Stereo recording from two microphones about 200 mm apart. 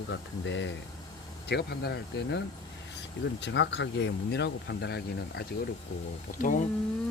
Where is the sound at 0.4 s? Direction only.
65° left (ahead or behind).